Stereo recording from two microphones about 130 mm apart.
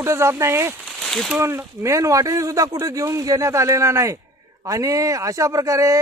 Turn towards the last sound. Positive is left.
turn(degrees=-25)  # may be behind; listen again after turning